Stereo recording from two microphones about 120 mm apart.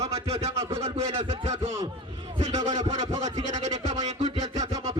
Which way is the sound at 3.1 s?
30° right (ahead or behind).